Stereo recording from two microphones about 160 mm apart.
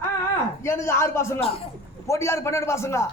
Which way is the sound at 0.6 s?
15° left (ahead or behind).